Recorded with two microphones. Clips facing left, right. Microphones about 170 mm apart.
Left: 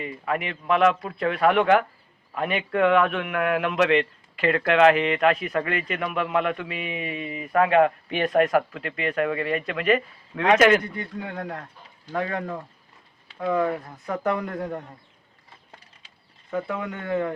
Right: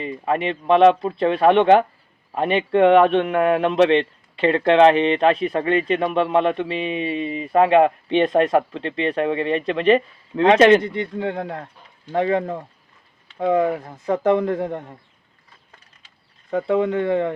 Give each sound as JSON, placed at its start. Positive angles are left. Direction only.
{"t": 0.0, "sound": "a man's voice", "side_deg": -30}
{"t": 16.5, "sound": "a man's voice", "side_deg": -25}